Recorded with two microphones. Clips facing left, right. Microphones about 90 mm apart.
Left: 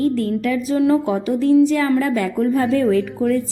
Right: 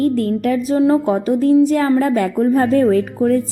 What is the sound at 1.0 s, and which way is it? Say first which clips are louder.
Music: right 3 dB; 40° right (ahead or behind).